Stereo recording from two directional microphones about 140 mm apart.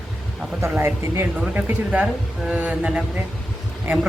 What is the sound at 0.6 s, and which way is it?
Speech, 20° right (ahead or behind).